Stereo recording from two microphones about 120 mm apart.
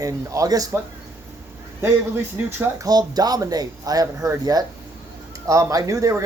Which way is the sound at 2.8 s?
35° right (ahead or behind).